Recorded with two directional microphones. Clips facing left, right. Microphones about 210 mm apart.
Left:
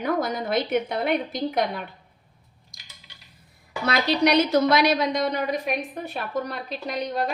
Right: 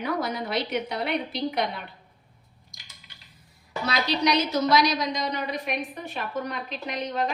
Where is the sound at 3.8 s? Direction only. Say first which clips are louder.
Left 4 dB; 55° left (ahead or behind); by 7.1 s 40° left (ahead or behind).